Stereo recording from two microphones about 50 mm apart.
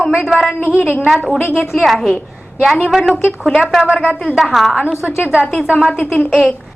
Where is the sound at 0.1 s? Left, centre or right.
Centre.